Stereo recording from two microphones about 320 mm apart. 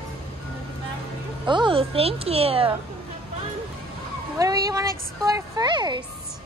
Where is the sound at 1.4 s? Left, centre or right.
Centre.